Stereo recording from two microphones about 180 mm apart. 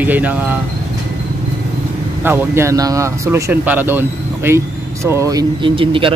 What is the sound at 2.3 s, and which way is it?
Speech, 15° right (ahead or behind).